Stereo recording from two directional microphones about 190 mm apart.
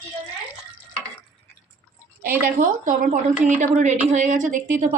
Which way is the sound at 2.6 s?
45° right (ahead or behind).